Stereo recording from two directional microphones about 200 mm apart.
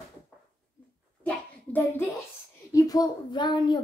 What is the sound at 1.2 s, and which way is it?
A child's voice, 10° left (ahead or behind).